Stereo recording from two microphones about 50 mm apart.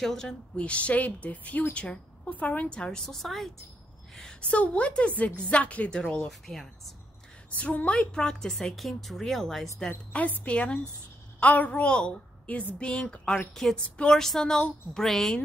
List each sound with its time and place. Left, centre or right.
0.0 s a woman's voice: centre
0.6 s speech: left
2.7 s speech: centre
3.1 s speech: centre
4.4 s speech: left
5.9 s a woman's voice: centre
6.2 s a woman's voice: centre
7.5 s a woman's voice: left; by 9.7 s centre
9.8 s a woman's voice: left
12.7 s speech: left
14.1 s a woman's voice: centre